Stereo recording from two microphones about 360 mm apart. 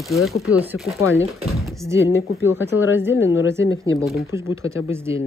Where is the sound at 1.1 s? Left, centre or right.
Centre.